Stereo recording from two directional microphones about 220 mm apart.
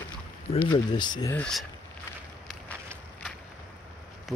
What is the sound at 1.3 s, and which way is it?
Speech, 5° left (ahead or behind).